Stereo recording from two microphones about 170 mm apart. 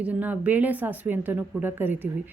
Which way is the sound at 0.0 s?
10° right (ahead or behind).